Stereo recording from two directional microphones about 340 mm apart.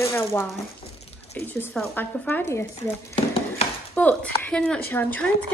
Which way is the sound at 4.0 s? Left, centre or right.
Centre.